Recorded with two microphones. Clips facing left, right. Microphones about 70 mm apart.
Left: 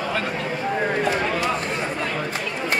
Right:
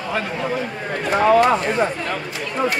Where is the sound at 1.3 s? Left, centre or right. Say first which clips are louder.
Right 9 dB; right.